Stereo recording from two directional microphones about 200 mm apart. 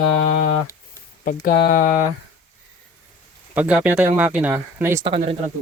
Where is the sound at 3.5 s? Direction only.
5° right (ahead or behind).